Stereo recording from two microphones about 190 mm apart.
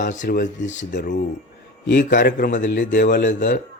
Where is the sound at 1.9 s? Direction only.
45° left (ahead or behind).